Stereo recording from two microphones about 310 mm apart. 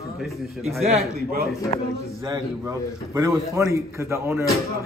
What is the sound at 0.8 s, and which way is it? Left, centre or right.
Speech, right.